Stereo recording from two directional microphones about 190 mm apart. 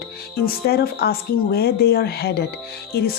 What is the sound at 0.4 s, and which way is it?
Speech, 55° left (ahead or behind).